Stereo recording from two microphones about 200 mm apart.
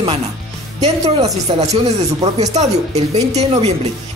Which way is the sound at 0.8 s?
30° right (ahead or behind).